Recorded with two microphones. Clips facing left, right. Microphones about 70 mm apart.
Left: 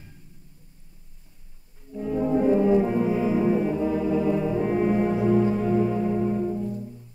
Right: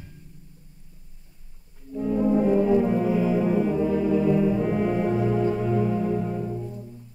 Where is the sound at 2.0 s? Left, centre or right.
Centre.